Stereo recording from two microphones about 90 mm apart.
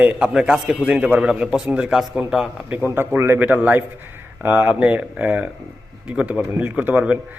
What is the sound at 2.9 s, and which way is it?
A man's voice, 25° right (ahead or behind).